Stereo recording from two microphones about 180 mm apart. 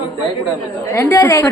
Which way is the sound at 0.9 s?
15° left (ahead or behind).